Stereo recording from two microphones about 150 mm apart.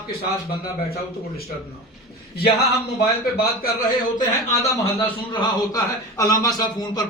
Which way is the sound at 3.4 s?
90° left.